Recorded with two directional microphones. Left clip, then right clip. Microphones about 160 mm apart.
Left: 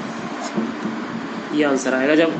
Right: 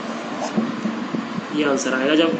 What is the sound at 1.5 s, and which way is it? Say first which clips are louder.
Speech: left 2 dB; 25° left (ahead or behind).